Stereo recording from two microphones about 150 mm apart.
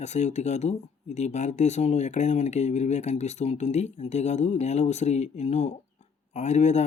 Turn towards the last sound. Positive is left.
turn(degrees=50)  # may be behind; listen again after turning